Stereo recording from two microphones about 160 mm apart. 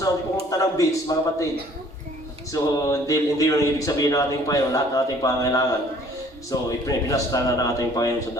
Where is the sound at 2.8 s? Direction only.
20° left (ahead or behind).